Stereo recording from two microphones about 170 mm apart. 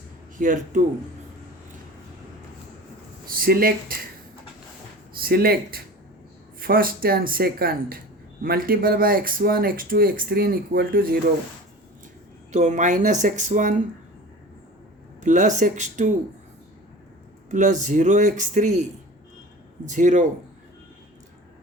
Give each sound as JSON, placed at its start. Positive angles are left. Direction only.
{"t": 0.3, "sound": "speech", "side_deg": -50}
{"t": 3.2, "sound": "speech", "side_deg": -60}
{"t": 5.2, "sound": "speech", "side_deg": -65}
{"t": 12.5, "sound": "speech", "side_deg": -45}
{"t": 15.2, "sound": "speech", "side_deg": -45}
{"t": 17.5, "sound": "speech", "side_deg": -45}